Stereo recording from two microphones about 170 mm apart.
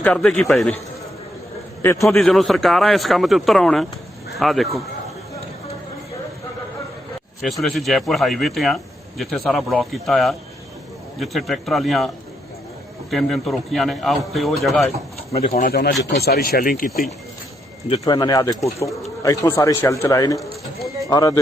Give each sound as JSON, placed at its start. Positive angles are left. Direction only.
{"t": 0.0, "sound": "speech", "side_deg": 5}
{"t": 1.8, "sound": "a man's voice", "side_deg": 15}
{"t": 2.0, "sound": "speech", "side_deg": 0}
{"t": 7.4, "sound": "speech", "side_deg": 0}
{"t": 15.3, "sound": "speech", "side_deg": 35}
{"t": 15.5, "sound": "speech", "side_deg": 60}
{"t": 18.0, "sound": "speech", "side_deg": 25}